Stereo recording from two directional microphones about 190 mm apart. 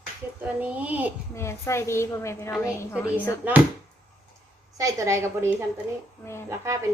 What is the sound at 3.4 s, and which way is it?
Speech, 10° right (ahead or behind).